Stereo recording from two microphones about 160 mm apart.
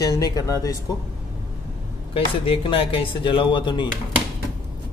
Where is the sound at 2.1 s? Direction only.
35° left (ahead or behind).